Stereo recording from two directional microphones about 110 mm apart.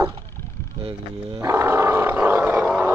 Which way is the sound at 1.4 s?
25° right (ahead or behind).